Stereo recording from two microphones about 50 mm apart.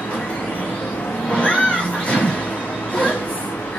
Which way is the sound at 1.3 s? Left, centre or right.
Left.